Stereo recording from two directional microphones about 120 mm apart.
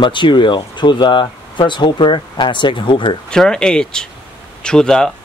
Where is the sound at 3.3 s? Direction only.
5° left (ahead or behind).